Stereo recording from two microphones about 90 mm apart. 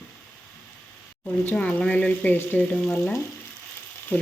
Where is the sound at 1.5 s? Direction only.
15° left (ahead or behind).